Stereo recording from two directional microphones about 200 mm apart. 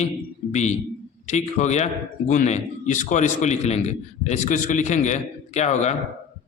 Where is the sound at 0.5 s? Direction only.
35° left (ahead or behind).